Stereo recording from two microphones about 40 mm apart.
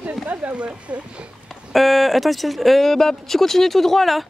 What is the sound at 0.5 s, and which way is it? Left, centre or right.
Speech, right.